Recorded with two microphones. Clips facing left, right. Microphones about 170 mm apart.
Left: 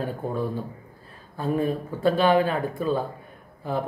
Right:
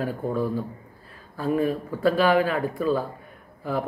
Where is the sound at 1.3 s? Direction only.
25° left (ahead or behind).